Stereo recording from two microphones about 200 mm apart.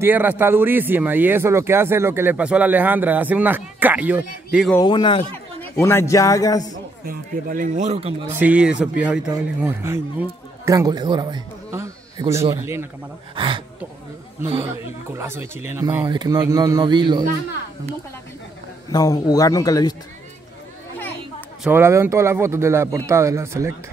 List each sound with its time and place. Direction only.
0.0 s speech: 10° right (ahead or behind)
4.8 s speech: 20° left (ahead or behind)
5.6 s a man's voice: 10° left (ahead or behind)
7.1 s speech: 45° right (ahead or behind)
8.4 s a man's voice: 5° right (ahead or behind)
13.4 s speech: 25° right (ahead or behind)
14.7 s speech: 10° right (ahead or behind)
18.9 s a man's voice: 20° left (ahead or behind)
21.6 s speech: 10° right (ahead or behind)